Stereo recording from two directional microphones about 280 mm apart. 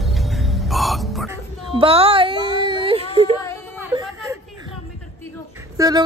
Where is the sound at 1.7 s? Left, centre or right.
Centre.